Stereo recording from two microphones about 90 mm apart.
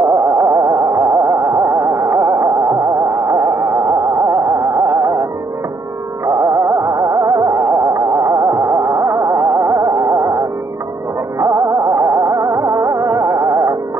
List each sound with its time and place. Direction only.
0.0 s carnatic music: 45° right (ahead or behind)
1.4 s music: 35° right (ahead or behind)
6.2 s music: 40° right (ahead or behind)